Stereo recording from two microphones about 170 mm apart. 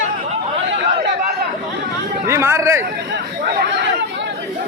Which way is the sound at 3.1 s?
75° right (ahead or behind).